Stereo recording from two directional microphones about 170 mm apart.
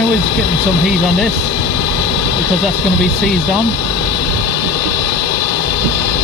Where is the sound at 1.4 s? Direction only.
90° left.